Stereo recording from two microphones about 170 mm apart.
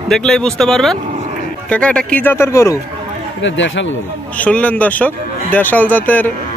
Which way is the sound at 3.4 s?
90° left.